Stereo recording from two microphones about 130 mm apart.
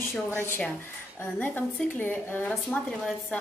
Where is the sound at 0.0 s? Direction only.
15° left (ahead or behind).